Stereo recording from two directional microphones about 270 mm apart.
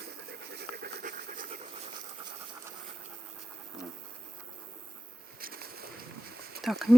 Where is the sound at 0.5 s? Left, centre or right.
Right.